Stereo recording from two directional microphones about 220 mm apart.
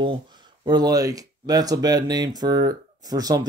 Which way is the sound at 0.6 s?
20° right (ahead or behind).